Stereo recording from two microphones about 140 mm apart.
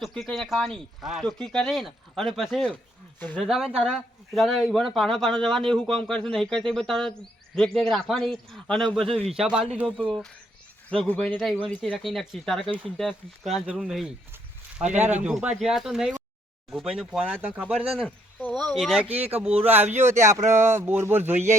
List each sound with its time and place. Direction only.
0.0 s speech: centre (ahead or behind)
9.4 s speech: 5° right (ahead or behind)
14.9 s speech: 10° right (ahead or behind)
20.1 s a sound: 20° right (ahead or behind)
20.4 s speech: 55° right (ahead or behind)
20.7 s speech: 15° right (ahead or behind)